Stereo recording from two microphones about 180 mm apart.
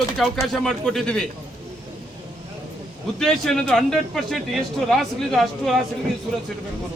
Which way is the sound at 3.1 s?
5° left (ahead or behind).